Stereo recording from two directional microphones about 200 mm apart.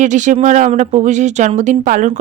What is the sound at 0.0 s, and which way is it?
A woman's voice, 40° right (ahead or behind).